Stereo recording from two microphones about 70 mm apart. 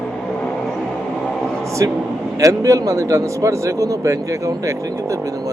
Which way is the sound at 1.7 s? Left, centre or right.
Right.